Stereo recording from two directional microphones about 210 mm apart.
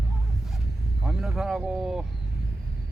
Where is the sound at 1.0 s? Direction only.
Centre (ahead or behind).